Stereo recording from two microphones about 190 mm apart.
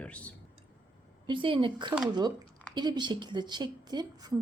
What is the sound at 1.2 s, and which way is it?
A woman's voice, 25° right (ahead or behind).